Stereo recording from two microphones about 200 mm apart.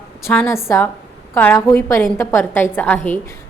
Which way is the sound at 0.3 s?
10° left (ahead or behind).